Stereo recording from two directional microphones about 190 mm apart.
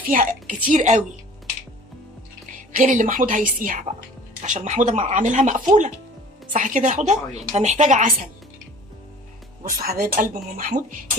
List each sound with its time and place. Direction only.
0.0 s a woman's voice: 45° right (ahead or behind)
2.7 s a woman's voice: 40° right (ahead or behind)
9.6 s a woman's voice: 50° right (ahead or behind)